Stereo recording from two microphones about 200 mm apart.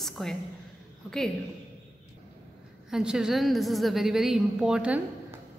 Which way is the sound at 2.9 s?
5° right (ahead or behind).